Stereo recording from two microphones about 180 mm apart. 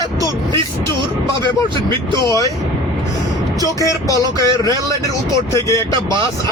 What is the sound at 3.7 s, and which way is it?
Music, 20° left (ahead or behind).